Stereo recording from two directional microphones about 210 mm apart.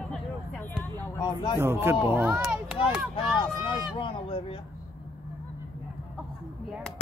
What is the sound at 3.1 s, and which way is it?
Speech, 25° left (ahead or behind).